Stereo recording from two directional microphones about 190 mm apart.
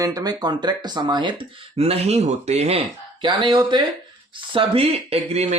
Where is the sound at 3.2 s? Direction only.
25° right (ahead or behind).